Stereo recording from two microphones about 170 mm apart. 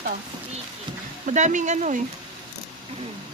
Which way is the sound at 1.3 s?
45° right (ahead or behind).